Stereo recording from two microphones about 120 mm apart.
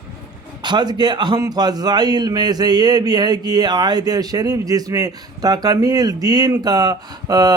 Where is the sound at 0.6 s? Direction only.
40° right (ahead or behind).